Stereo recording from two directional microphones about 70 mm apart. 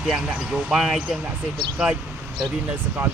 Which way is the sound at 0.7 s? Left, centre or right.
Centre.